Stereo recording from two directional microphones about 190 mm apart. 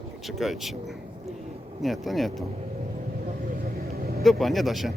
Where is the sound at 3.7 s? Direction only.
50° right (ahead or behind).